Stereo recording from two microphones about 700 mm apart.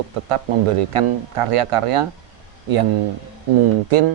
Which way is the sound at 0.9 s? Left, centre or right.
Right.